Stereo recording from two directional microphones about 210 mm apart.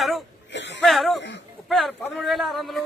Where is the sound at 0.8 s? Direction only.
Centre (ahead or behind).